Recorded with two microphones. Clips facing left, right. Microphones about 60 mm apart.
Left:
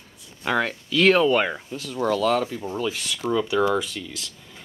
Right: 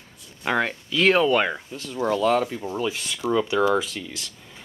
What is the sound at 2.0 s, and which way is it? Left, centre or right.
Speech, centre.